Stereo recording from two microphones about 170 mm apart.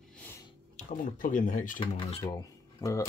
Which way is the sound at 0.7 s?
50° left (ahead or behind).